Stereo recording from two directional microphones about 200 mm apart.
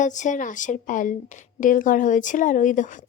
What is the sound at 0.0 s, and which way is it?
Speech, 40° left (ahead or behind).